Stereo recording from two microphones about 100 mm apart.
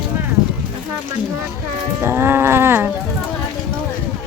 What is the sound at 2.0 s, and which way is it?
Speech, 25° right (ahead or behind).